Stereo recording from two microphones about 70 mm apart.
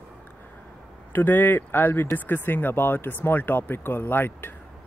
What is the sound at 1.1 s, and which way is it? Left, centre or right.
Speech, left.